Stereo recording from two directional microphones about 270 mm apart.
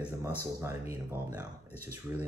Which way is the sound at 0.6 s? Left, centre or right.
Centre.